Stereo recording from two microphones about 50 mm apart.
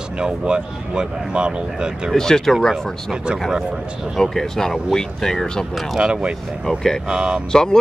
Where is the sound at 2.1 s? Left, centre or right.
Centre.